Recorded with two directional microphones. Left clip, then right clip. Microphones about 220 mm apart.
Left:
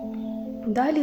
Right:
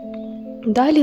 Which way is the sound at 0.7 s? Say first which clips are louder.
Right 7 dB; 45° right (ahead or behind).